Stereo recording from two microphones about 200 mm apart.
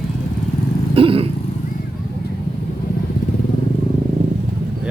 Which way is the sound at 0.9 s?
25° right (ahead or behind).